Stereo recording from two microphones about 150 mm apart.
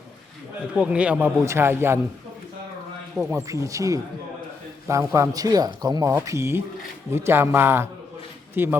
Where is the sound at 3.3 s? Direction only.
20° right (ahead or behind).